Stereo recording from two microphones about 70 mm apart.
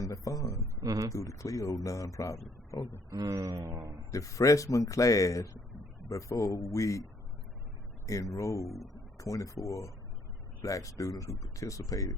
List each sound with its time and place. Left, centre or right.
0.0 s speech: left
0.8 s speech: right
1.1 s speech: left
3.1 s speech: right
3.6 s speech: right
4.1 s speech: left
8.0 s speech: left